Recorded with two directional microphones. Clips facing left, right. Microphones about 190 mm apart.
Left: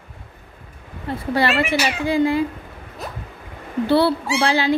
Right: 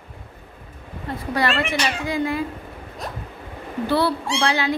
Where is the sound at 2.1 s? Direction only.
30° left (ahead or behind).